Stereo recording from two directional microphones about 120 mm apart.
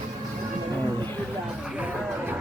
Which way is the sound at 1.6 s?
10° right (ahead or behind).